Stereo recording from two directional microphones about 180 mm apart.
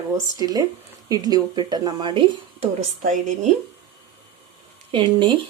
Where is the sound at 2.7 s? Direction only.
40° right (ahead or behind).